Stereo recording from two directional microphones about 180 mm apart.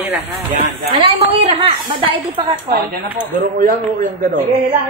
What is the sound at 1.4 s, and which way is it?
A woman's voice, 30° right (ahead or behind).